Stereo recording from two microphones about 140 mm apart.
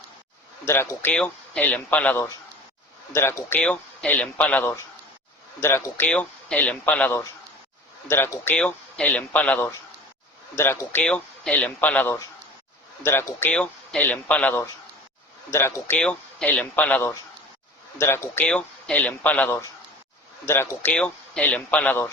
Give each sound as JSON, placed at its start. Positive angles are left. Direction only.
{"t": 0.6, "sound": "speech", "side_deg": 15}
{"t": 3.6, "sound": "a man's voice", "side_deg": 5}
{"t": 6.1, "sound": "a man's voice", "side_deg": 5}
{"t": 16.0, "sound": "speech", "side_deg": 5}